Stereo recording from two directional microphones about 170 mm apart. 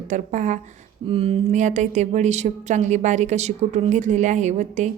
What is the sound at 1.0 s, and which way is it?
Speech, 35° right (ahead or behind).